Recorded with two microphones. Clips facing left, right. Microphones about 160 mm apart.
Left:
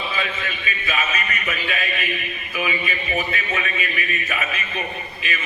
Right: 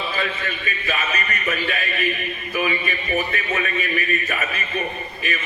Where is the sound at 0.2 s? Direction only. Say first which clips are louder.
Right 1 dB; 45° right (ahead or behind).